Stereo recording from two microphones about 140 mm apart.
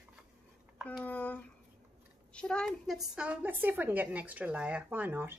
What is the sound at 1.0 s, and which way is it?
Speech, 10° left (ahead or behind).